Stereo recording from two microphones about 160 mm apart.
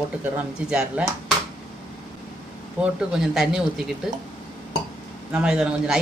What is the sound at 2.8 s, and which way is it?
Speech, 5° right (ahead or behind).